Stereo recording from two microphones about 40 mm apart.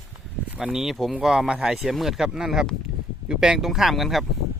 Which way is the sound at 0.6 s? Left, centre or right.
Centre.